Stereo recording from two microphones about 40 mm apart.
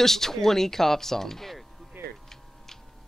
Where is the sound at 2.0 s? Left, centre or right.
Right.